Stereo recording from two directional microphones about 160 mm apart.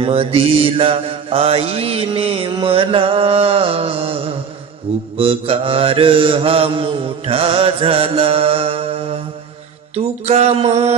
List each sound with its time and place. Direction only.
0.0 s mantra: 35° right (ahead or behind)